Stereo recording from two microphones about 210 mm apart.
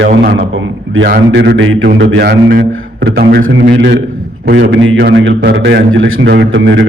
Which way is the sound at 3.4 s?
60° right (ahead or behind).